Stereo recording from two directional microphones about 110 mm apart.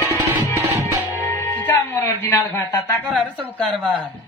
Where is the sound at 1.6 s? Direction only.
20° left (ahead or behind).